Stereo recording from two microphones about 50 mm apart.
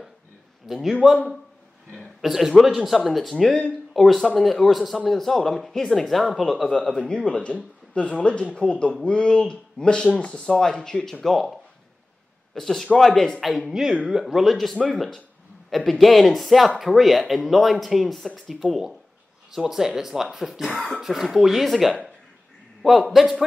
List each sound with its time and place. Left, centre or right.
0.7 s speech: centre
2.2 s speech: centre
7.1 s speech: centre
11.2 s speech: centre
12.5 s speech: centre
13.7 s speech: centre
22.8 s speech: centre